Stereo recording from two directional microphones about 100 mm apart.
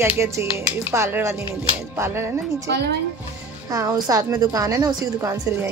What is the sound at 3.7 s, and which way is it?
A woman's voice, 35° right (ahead or behind).